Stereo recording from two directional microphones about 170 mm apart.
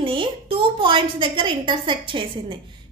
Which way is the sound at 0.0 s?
30° right (ahead or behind).